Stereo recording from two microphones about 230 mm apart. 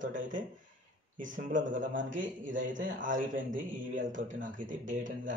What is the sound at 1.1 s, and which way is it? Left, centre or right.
Speech, right.